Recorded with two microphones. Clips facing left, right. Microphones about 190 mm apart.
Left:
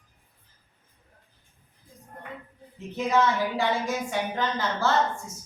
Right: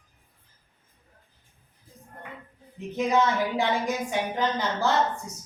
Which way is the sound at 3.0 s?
20° right (ahead or behind).